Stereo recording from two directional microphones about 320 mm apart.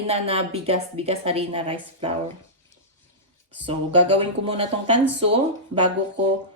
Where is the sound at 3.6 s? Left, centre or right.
Centre.